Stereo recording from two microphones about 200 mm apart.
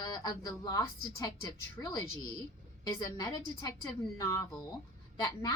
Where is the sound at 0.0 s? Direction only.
20° left (ahead or behind).